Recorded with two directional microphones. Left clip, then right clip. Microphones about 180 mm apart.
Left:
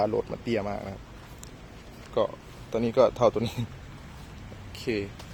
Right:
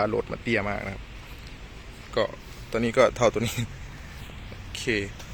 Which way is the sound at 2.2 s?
5° left (ahead or behind).